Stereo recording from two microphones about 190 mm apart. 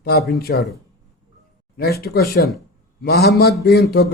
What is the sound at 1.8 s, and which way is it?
Speech, 55° left (ahead or behind).